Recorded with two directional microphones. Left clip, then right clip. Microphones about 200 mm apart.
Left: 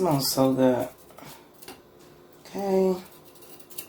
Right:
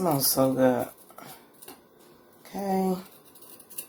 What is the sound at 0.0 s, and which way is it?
Speech, 40° right (ahead or behind).